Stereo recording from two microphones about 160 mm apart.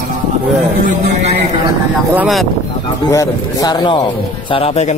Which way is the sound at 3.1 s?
20° left (ahead or behind).